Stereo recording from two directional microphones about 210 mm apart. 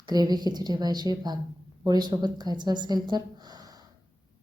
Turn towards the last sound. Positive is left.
turn(degrees=-20)  # may be behind; listen again after turning